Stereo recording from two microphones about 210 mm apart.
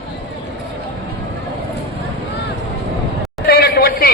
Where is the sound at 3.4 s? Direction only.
45° left (ahead or behind).